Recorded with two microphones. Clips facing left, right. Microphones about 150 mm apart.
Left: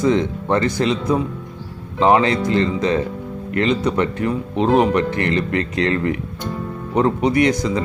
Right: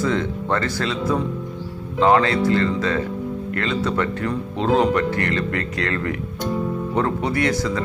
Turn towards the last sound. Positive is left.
turn(degrees=20)  # may be behind; listen again after turning